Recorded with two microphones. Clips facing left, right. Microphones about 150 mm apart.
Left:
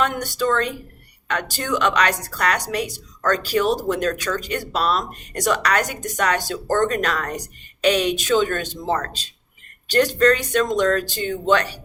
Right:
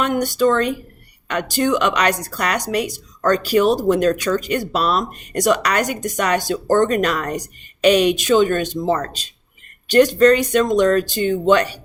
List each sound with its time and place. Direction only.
0.0 s speech: 15° right (ahead or behind)